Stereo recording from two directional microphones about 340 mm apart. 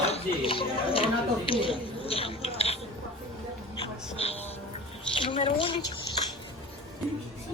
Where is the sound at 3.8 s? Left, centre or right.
Centre.